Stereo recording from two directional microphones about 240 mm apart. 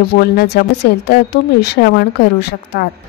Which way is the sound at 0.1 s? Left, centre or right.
Left.